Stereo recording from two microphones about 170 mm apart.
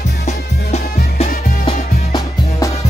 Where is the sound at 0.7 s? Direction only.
40° left (ahead or behind).